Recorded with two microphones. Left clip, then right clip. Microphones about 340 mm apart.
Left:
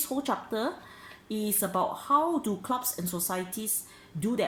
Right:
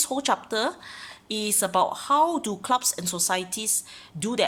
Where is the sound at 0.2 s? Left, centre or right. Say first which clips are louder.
Right 5 dB; right.